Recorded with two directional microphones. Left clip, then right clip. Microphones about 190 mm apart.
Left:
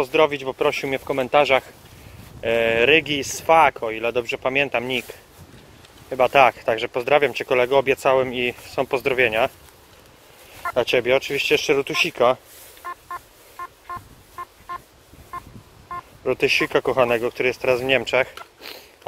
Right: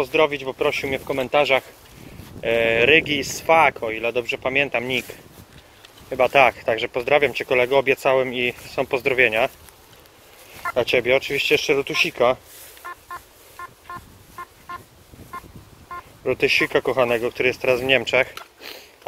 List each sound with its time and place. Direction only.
0.0 s speech: 10° left (ahead or behind)
6.0 s speech: centre (ahead or behind)
10.6 s speech: 5° left (ahead or behind)
12.8 s telephone dialing: 15° left (ahead or behind)
16.3 s speech: 5° left (ahead or behind)